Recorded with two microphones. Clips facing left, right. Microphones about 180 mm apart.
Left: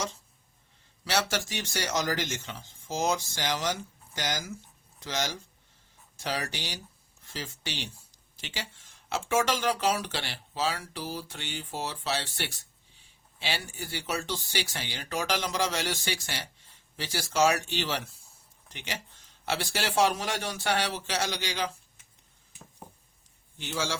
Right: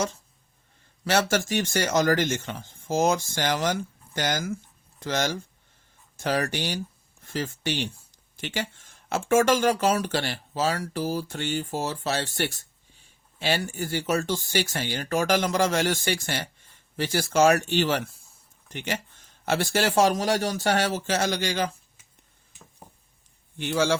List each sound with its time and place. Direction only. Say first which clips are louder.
1.0 s speech: right 6 dB; 50° right (ahead or behind)
23.6 s a man's voice: right 9 dB; 60° right (ahead or behind)